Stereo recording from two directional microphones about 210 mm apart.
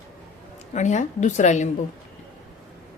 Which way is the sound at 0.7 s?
35° left (ahead or behind).